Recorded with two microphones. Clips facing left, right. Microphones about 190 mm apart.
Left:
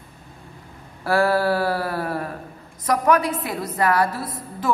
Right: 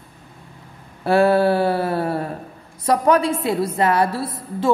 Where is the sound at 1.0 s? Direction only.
25° right (ahead or behind).